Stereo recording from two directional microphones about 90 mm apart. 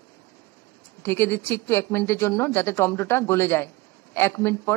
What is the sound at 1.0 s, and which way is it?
Speech, 25° left (ahead or behind).